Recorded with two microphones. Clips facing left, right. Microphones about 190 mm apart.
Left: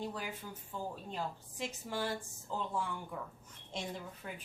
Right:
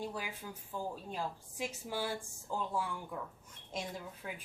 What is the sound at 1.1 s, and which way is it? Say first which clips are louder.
Speech: right 1 dB; 10° right (ahead or behind).